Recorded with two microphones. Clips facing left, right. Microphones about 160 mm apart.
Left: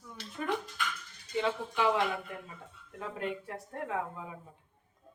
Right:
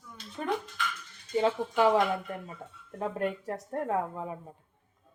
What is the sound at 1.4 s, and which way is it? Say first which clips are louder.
Speech: right 5 dB; 40° right (ahead or behind).